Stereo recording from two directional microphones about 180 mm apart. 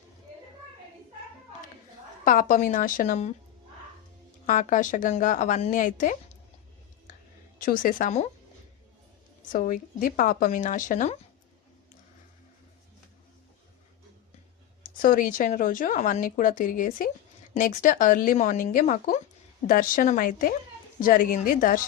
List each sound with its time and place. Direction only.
2.2 s speech: 50° left (ahead or behind)
4.4 s speech: 45° left (ahead or behind)
7.6 s speech: 50° left (ahead or behind)
9.5 s speech: 50° left (ahead or behind)
14.8 s speech: 50° left (ahead or behind)